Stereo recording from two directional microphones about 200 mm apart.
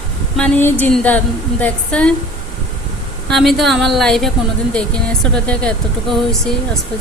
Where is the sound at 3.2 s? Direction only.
Centre (ahead or behind).